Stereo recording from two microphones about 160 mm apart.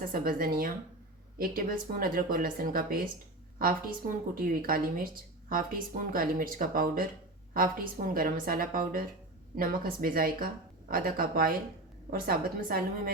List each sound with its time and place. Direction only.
0.1 s speech: 60° right (ahead or behind)